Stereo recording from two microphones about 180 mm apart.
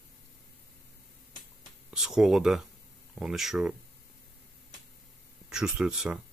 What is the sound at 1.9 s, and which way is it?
Speech, 5° right (ahead or behind).